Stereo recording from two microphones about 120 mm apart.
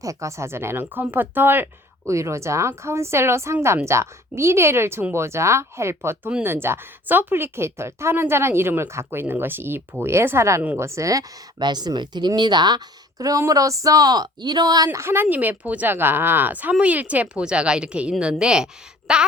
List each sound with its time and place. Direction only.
0.0 s speech: 25° right (ahead or behind)
14.8 s speech: 20° right (ahead or behind)